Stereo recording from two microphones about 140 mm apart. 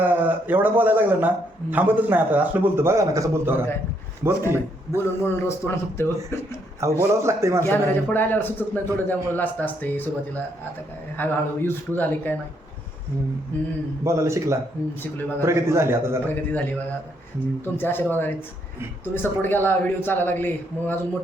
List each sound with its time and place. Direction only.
0.0 s a man's voice: 15° right (ahead or behind)
4.9 s a man's voice: 15° left (ahead or behind)
6.7 s a man's voice: 20° right (ahead or behind)
7.6 s a man's voice: 15° left (ahead or behind)
11.2 s a man's voice: 15° left (ahead or behind)
14.0 s a man's voice: 20° right (ahead or behind)
16.3 s a man's voice: 15° left (ahead or behind)
17.7 s a man's voice: 15° left (ahead or behind)